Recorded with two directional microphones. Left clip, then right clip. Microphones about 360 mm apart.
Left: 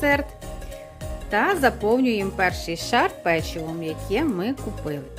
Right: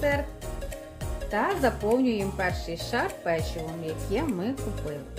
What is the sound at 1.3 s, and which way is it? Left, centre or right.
Speech, left.